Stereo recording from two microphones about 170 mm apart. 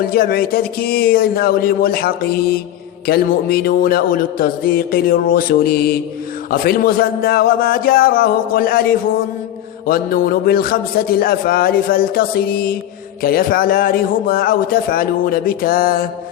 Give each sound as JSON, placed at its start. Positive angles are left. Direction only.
{"t": 0.0, "sound": "a man's voice", "side_deg": 60}